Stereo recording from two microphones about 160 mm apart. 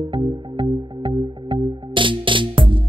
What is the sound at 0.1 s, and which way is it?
Music, 30° right (ahead or behind).